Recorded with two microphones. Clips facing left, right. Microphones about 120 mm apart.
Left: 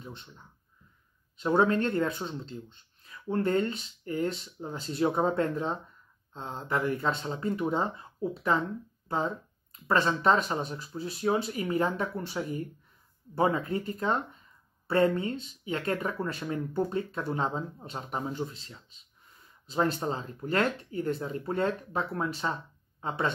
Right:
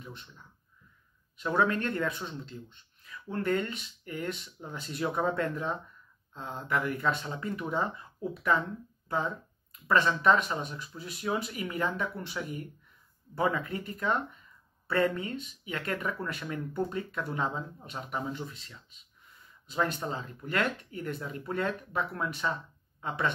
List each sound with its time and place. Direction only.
0.0 s speech: 30° left (ahead or behind)
1.4 s speech: 30° left (ahead or behind)